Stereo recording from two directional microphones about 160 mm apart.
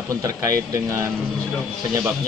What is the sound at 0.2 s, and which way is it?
Speech, 20° right (ahead or behind).